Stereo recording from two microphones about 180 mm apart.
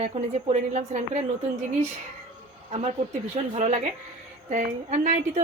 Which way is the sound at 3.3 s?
40° right (ahead or behind).